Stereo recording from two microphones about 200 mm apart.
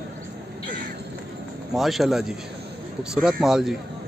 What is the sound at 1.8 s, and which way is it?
A man's voice, centre (ahead or behind).